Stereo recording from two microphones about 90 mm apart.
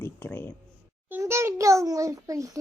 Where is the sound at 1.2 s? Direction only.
30° right (ahead or behind).